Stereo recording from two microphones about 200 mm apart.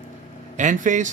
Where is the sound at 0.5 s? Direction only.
40° right (ahead or behind).